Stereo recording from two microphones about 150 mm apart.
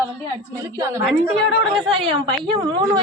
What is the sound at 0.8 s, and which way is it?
Speech, 20° right (ahead or behind).